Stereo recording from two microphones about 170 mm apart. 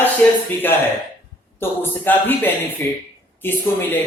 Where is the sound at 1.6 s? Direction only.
10° left (ahead or behind).